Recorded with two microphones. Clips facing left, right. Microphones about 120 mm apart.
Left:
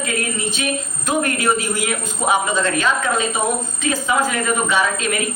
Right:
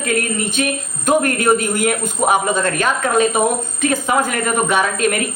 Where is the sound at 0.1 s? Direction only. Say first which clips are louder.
Right 8 dB; 50° right (ahead or behind).